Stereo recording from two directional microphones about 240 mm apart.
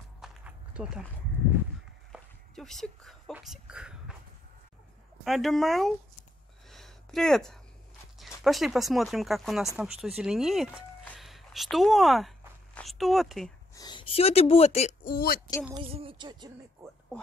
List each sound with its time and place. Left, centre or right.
0.2 s walk: centre
2.1 s speech: centre
5.2 s speech: centre
6.7 s a sound: centre
8.2 s speech: centre
13.7 s speech: centre; by 15.4 s left
15.7 s speech: right